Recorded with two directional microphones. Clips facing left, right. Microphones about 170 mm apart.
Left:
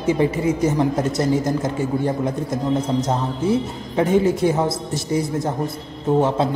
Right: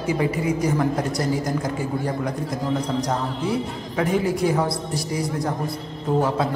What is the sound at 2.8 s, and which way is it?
A woman's voice, 25° left (ahead or behind).